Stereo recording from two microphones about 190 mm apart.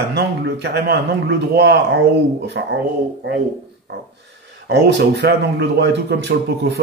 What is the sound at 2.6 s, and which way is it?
Speech, 70° right (ahead or behind).